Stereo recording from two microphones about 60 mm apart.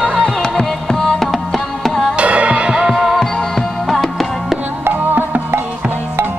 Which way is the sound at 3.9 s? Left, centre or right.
Centre.